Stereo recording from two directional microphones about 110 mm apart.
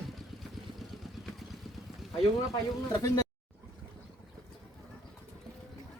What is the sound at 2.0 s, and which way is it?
Boat, centre (ahead or behind).